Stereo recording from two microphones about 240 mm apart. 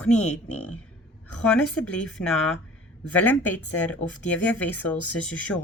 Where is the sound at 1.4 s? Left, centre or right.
Centre.